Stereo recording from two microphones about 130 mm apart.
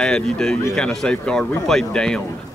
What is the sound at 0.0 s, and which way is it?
Speech, 5° left (ahead or behind).